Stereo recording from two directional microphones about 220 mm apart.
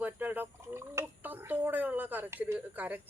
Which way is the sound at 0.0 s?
10° right (ahead or behind).